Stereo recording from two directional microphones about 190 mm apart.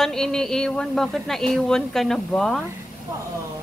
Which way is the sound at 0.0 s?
5° left (ahead or behind).